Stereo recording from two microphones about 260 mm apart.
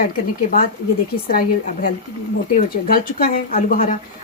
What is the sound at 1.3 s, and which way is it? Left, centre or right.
Speech, left.